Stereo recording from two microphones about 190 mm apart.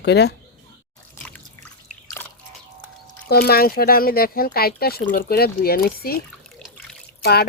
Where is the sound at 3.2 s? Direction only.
55° left (ahead or behind).